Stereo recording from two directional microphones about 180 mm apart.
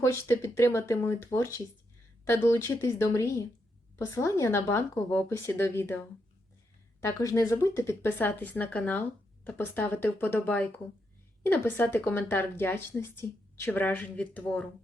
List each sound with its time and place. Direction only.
0.0 s speech: 15° left (ahead or behind)